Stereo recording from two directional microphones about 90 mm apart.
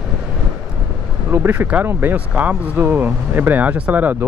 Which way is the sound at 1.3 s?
25° right (ahead or behind).